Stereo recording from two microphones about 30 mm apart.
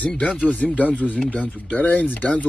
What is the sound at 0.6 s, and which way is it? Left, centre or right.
Speech, left.